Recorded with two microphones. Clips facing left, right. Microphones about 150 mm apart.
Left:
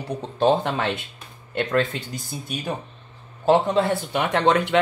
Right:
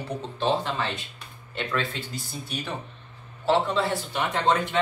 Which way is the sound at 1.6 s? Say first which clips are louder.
Left 7 dB; 45° left (ahead or behind).